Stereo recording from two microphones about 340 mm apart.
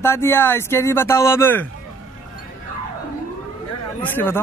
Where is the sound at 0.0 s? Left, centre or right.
Centre.